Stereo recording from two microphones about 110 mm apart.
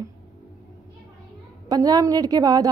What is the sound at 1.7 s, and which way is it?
Speech, 35° right (ahead or behind).